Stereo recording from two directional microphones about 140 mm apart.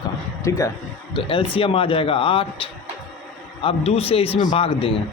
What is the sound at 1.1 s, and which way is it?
A man's voice, 40° left (ahead or behind).